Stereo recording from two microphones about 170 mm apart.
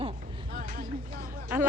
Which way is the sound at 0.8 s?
55° right (ahead or behind).